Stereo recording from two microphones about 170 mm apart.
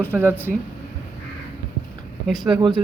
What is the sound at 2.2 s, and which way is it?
Speech, centre (ahead or behind).